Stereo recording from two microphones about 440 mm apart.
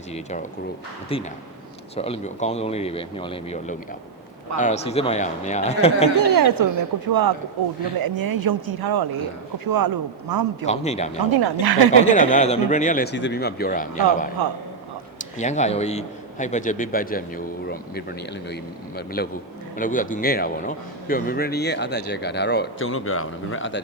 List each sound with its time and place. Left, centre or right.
0.1 s a man's voice: centre
6.1 s speech: right
10.7 s a man's voice: centre
11.3 s speech: right
11.9 s a man's voice: centre